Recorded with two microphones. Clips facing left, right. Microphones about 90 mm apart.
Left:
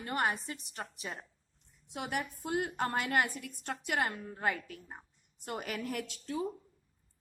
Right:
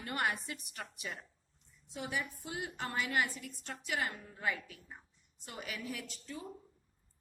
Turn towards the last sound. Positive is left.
turn(degrees=65)  # may be behind; listen again after turning